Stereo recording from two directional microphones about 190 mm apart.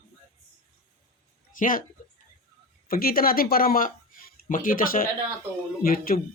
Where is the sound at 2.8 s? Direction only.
50° left (ahead or behind).